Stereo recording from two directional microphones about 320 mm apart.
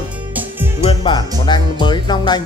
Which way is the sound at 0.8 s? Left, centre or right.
Centre.